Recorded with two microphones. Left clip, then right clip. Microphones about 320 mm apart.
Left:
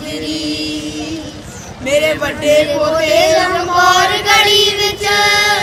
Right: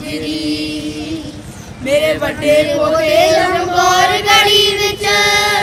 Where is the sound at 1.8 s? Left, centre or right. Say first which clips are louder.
Even; centre.